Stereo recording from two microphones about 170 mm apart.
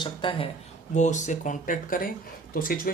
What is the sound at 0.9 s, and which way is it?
Speech, 45° left (ahead or behind).